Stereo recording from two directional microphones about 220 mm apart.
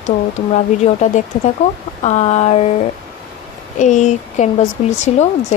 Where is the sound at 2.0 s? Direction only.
30° left (ahead or behind).